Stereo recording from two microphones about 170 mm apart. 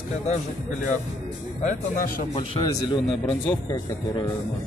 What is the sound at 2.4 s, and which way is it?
Speech, 25° left (ahead or behind).